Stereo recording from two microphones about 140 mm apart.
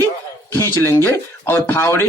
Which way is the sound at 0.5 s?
20° left (ahead or behind).